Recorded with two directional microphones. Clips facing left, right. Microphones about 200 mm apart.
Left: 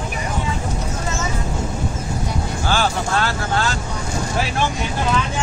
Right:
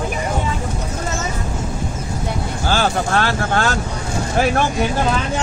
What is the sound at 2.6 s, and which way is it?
Vehicle, 40° right (ahead or behind).